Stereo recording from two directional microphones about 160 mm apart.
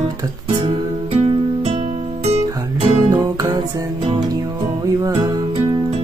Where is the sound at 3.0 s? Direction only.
25° right (ahead or behind).